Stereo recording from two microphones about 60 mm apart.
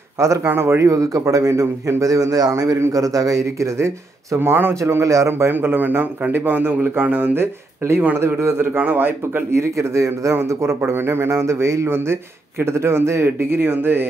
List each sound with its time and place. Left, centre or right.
0.2 s a man's voice: right
0.8 s a man's voice: right
1.5 s a man's voice: right
4.7 s speech: right
5.5 s a man's voice: right
7.8 s a man's voice: right
9.6 s a man's voice: right